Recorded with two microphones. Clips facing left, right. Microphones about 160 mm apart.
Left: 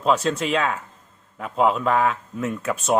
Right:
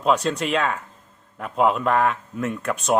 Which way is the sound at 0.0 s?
Centre (ahead or behind).